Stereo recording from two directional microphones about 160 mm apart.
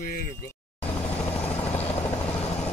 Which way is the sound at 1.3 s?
10° left (ahead or behind).